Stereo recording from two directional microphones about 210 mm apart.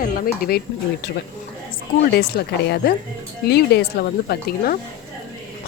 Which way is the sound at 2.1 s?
50° left (ahead or behind).